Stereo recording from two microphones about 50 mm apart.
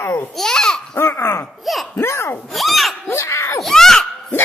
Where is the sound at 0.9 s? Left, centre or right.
Left.